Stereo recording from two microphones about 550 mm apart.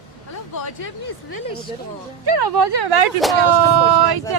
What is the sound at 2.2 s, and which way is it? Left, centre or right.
Speech, right.